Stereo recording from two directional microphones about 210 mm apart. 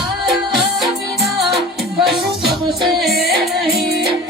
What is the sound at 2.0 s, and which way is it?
Music, centre (ahead or behind).